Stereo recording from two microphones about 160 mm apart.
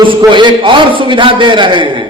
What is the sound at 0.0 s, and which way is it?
A man's voice, 30° right (ahead or behind).